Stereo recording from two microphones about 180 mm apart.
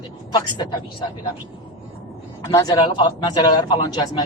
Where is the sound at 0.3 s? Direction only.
20° left (ahead or behind).